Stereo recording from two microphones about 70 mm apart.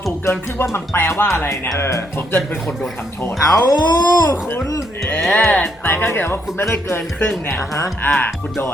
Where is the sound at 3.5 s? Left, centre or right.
Left.